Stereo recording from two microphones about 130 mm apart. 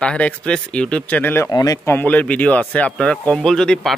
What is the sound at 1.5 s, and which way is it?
Speech, 30° left (ahead or behind).